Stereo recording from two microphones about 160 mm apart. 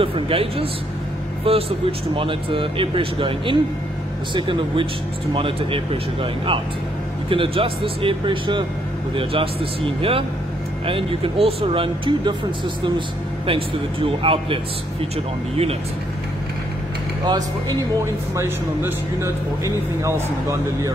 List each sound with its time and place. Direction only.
0.0 s speech: 35° right (ahead or behind)
7.2 s speech: 35° right (ahead or behind)
18.3 s speech: 15° right (ahead or behind)